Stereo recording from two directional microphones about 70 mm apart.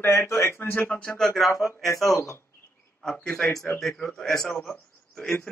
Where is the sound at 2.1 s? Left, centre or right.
Left.